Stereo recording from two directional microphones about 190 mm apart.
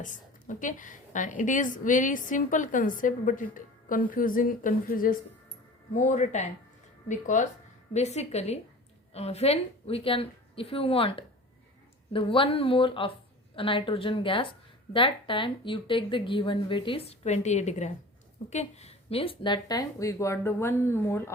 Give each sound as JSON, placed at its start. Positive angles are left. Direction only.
{"t": 0.0, "sound": "a woman's voice", "side_deg": 45}